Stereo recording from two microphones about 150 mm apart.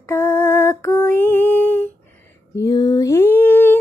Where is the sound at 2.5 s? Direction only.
25° left (ahead or behind).